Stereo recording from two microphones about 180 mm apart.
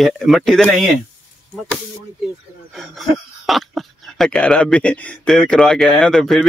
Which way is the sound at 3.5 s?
Centre (ahead or behind).